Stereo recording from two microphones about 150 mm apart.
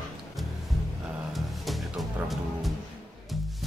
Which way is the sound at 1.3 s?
Centre (ahead or behind).